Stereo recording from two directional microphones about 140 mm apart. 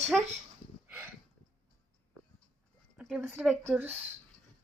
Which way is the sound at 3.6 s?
15° right (ahead or behind).